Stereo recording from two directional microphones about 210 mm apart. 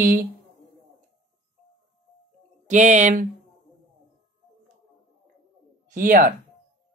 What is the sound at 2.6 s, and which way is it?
Speech, 35° right (ahead or behind).